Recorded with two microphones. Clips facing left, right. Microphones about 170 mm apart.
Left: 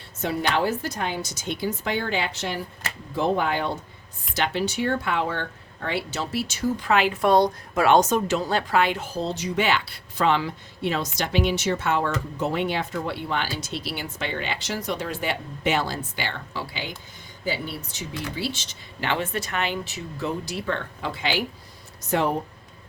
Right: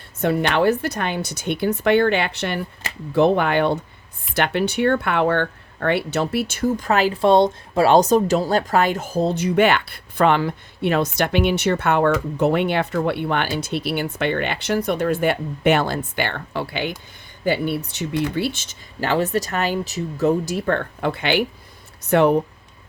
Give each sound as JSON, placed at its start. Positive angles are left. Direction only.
{"t": 0.2, "sound": "speech", "side_deg": -60}